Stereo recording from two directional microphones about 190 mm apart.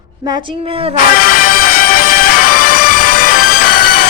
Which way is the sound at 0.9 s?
50° left (ahead or behind).